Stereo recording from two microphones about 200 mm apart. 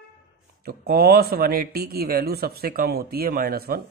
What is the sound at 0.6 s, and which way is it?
Speech, 50° right (ahead or behind).